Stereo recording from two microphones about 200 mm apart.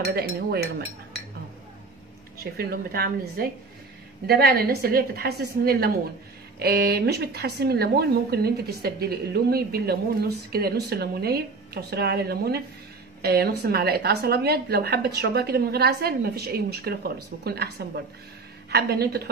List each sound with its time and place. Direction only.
0.0 s speech: 55° right (ahead or behind)
2.3 s speech: 50° right (ahead or behind)